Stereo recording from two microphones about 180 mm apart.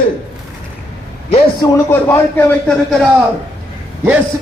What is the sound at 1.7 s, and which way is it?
Speech, 15° left (ahead or behind).